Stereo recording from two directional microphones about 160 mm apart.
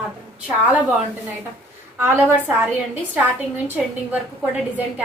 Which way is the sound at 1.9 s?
15° right (ahead or behind).